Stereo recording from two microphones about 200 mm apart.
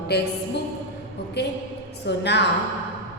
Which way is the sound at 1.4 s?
55° left (ahead or behind).